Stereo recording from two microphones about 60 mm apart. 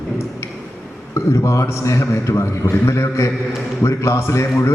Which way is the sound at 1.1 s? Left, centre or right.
Left.